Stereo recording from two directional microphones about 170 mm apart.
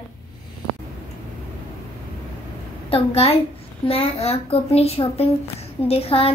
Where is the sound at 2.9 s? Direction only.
35° left (ahead or behind).